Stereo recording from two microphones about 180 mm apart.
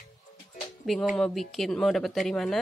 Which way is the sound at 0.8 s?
Centre (ahead or behind).